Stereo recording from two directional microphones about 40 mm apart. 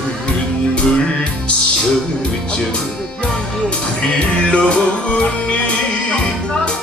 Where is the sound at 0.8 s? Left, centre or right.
Left.